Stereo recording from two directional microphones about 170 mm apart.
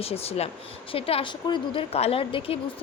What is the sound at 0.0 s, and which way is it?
A woman's voice, 35° left (ahead or behind).